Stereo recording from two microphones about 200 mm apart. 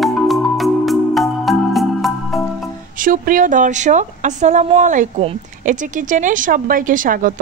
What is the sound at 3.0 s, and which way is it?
Speech, 45° right (ahead or behind).